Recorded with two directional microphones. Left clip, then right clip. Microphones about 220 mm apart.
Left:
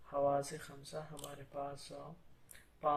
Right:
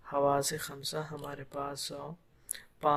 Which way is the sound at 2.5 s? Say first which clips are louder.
Right 6 dB; 50° right (ahead or behind).